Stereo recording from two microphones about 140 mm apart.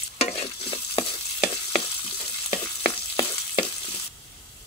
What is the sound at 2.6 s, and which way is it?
Frying, 25° left (ahead or behind).